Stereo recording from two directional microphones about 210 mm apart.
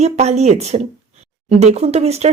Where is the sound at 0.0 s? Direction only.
30° right (ahead or behind).